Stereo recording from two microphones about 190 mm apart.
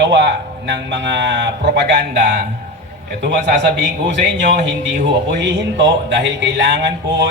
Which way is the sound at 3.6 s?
70° right (ahead or behind).